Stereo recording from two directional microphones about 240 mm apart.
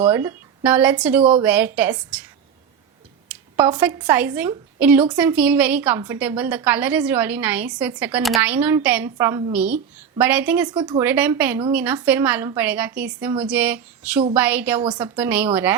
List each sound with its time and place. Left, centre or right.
0.0 s a woman's voice: centre
3.2 s a sound: centre
4.0 s a woman's voice: centre
10.7 s speech: centre
11.0 s a woman's voice: centre